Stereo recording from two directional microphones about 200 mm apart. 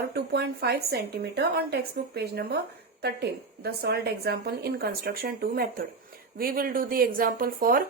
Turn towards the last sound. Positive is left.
turn(degrees=-45)  # may be behind; listen again after turning